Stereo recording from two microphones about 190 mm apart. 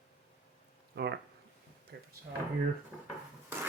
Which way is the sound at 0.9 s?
60° right (ahead or behind).